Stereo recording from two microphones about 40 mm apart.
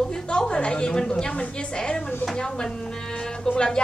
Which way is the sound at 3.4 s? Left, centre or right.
Centre.